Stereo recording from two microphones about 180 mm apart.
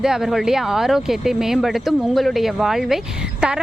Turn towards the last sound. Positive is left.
turn(degrees=-5)  # may be behind; listen again after turning